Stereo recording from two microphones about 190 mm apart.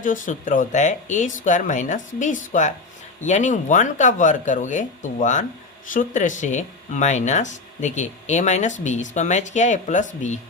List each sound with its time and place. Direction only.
0.0 s speech: 45° left (ahead or behind)